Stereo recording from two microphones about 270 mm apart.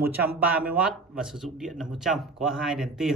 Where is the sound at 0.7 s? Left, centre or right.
Centre.